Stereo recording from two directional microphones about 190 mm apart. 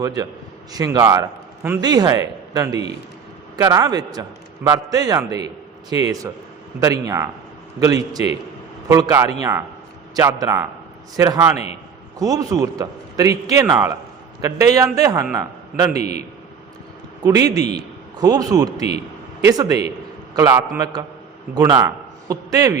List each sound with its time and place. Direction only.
0.0 s a man's voice: 20° right (ahead or behind)
11.5 s a man's voice: 35° left (ahead or behind)
12.2 s a man's voice: 20° right (ahead or behind)
13.7 s a man's voice: 5° right (ahead or behind)
14.4 s a man's voice: 20° right (ahead or behind)
16.0 s a man's voice: 35° left (ahead or behind)
17.2 s a man's voice: 20° right (ahead or behind)